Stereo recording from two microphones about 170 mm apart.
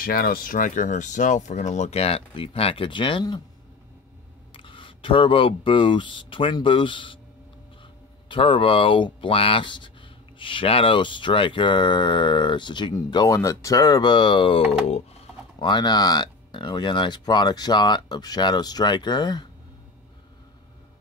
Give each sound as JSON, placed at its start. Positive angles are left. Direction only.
{"t": 0.0, "sound": "speech", "side_deg": 60}
{"t": 4.6, "sound": "speech", "side_deg": 30}
{"t": 8.3, "sound": "speech", "side_deg": 30}